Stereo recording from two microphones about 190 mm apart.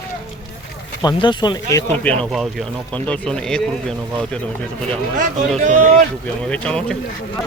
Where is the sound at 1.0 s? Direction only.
25° left (ahead or behind).